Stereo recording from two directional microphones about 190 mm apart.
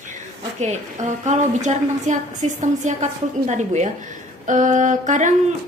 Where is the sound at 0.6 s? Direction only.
35° right (ahead or behind).